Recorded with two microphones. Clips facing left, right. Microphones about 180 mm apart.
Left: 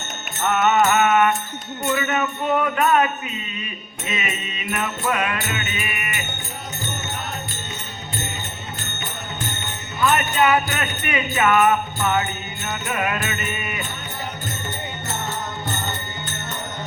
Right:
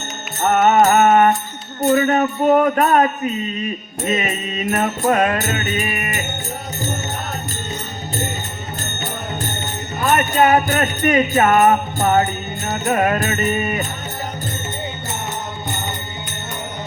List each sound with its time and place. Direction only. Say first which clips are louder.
0.3 s music: right 5 dB; 40° right (ahead or behind)
1.8 s jingle bell: right 8 dB; 35° right (ahead or behind)
10.0 s jingle bell: right 3 dB; 40° right (ahead or behind)